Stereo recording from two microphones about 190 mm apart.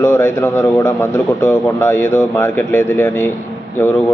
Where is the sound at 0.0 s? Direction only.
10° left (ahead or behind).